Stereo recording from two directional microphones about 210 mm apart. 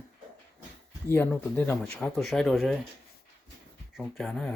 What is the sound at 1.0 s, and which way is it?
Speech, 10° left (ahead or behind).